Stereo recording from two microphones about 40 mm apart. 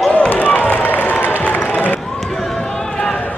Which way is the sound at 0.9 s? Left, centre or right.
Left.